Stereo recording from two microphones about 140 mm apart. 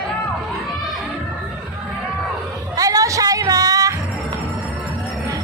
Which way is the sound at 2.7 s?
25° right (ahead or behind).